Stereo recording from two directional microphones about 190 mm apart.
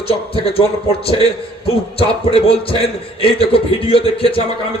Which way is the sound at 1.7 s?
30° left (ahead or behind).